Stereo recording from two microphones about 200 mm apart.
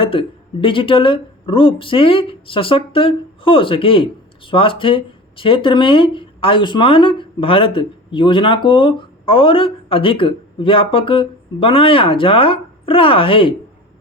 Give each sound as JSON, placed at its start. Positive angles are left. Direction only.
{"t": 0.0, "sound": "speech", "side_deg": 25}